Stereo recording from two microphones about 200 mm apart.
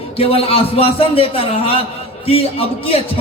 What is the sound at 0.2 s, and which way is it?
A man's voice, 30° left (ahead or behind).